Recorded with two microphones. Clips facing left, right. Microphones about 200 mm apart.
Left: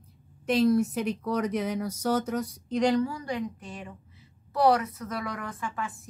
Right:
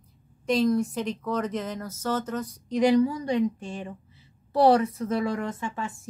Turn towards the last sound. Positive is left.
turn(degrees=-25)  # may be behind; listen again after turning